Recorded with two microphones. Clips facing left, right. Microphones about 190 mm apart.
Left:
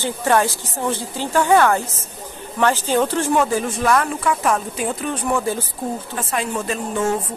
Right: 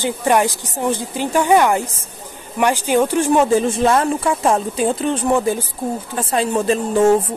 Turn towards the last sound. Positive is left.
turn(degrees=-30)  # may be behind; listen again after turning